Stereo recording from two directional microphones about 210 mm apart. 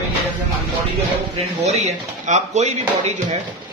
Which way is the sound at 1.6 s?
30° right (ahead or behind).